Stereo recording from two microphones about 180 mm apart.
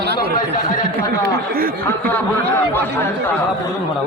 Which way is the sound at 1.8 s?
10° left (ahead or behind).